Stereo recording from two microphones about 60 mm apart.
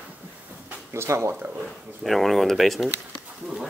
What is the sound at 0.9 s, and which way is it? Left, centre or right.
Speech, right.